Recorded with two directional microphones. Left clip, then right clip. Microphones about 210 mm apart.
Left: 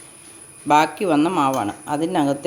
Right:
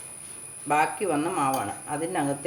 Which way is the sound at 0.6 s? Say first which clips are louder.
Left 7 dB; 45° left (ahead or behind).